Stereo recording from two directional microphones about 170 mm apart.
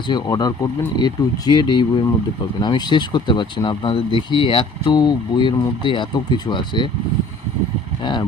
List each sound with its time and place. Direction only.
0.1 s speech: 25° left (ahead or behind)